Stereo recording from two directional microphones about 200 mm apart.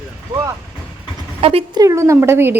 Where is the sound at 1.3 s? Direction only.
30° right (ahead or behind).